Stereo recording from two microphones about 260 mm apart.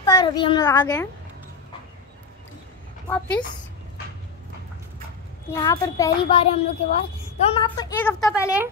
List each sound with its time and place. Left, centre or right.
0.0 s a child's voice: centre
3.1 s a woman's voice: centre
5.5 s a child's voice: centre